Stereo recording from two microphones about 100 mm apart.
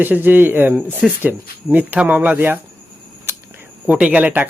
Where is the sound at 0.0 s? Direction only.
20° right (ahead or behind).